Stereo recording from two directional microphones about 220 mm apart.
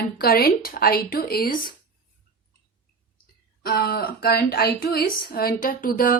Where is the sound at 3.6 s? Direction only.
45° left (ahead or behind).